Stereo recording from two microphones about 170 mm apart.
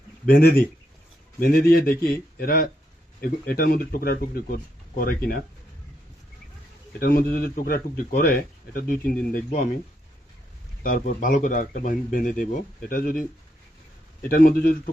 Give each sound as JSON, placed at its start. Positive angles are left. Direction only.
{"t": 0.3, "sound": "a man's voice", "side_deg": 60}
{"t": 7.0, "sound": "a man's voice", "side_deg": 60}
{"t": 10.8, "sound": "a man's voice", "side_deg": 55}
{"t": 14.3, "sound": "a man's voice", "side_deg": 60}